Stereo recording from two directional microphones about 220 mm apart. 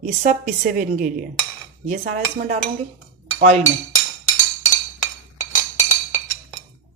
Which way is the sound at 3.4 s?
30° right (ahead or behind).